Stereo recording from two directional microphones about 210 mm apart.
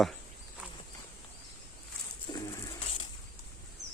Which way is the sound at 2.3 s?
20° left (ahead or behind).